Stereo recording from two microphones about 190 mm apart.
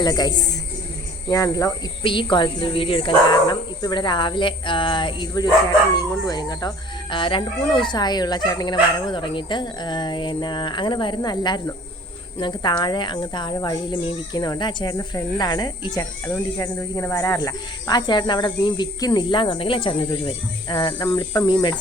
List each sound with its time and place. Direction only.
0.0 s a child's voice: 20° left (ahead or behind)